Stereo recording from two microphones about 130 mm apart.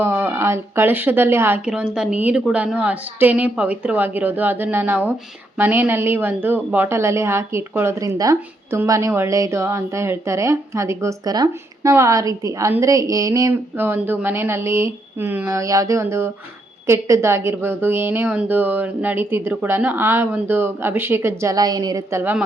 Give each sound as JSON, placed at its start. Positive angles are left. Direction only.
{"t": 0.0, "sound": "a woman's voice", "side_deg": -15}
{"t": 22.2, "sound": "a woman's voice", "side_deg": -15}